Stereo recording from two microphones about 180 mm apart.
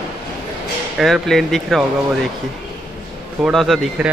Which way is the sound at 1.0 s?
Centre (ahead or behind).